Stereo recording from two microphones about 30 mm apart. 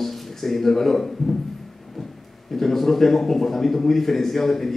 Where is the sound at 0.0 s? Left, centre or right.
Centre.